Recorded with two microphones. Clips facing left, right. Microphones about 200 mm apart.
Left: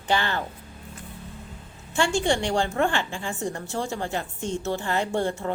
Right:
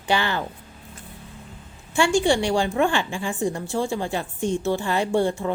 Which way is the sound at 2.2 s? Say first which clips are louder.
Right 3 dB; 15° right (ahead or behind).